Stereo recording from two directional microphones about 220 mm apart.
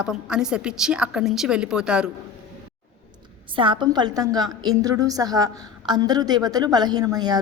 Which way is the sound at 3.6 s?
20° right (ahead or behind).